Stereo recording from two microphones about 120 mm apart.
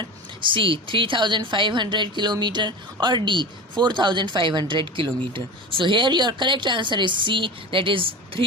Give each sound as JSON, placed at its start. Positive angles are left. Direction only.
{"t": 0.0, "sound": "a woman's voice", "side_deg": -45}